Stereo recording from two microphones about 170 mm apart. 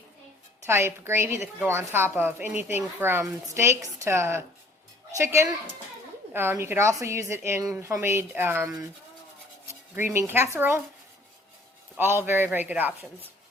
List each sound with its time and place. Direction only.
0.6 s a woman's voice: 15° right (ahead or behind)
11.9 s a woman's voice: 10° right (ahead or behind)